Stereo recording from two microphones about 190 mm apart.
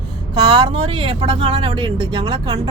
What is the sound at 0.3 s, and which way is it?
Speech, 20° right (ahead or behind).